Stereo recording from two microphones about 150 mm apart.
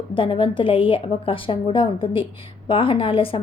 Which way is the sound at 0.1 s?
35° left (ahead or behind).